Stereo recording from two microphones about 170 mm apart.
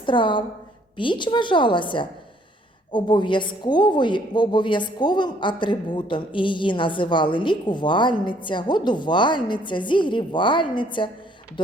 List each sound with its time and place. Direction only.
0.0 s a woman's voice: 30° left (ahead or behind)